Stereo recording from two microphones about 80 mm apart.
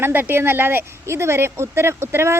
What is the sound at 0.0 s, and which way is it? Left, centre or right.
Speech, right.